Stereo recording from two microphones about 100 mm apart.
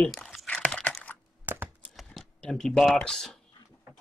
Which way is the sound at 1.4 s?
20° right (ahead or behind).